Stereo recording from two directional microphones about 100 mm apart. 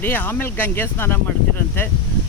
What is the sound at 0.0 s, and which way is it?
Speech, 20° left (ahead or behind).